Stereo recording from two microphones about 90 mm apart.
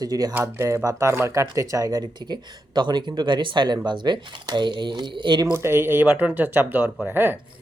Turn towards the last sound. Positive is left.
turn(degrees=-20)  # may be behind; listen again after turning